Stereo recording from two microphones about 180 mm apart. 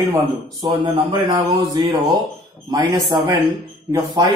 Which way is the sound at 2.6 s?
20° right (ahead or behind).